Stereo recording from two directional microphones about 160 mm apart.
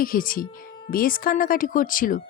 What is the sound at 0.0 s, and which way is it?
A woman's voice, 60° left (ahead or behind).